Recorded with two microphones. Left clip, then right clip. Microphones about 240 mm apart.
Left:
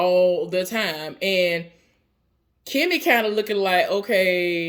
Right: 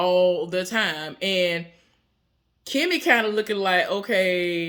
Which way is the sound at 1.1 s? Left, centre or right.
Right.